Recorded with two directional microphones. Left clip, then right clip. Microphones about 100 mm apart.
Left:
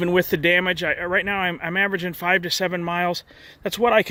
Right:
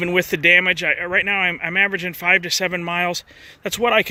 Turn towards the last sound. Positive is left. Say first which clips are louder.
# right 1 dB
turn(degrees=30)  # may be behind; listen again after turning